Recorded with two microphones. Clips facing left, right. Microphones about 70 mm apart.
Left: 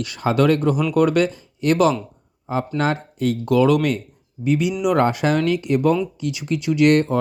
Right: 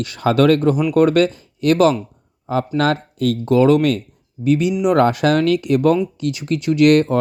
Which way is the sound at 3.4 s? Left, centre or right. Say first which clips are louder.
Right 3 dB; right.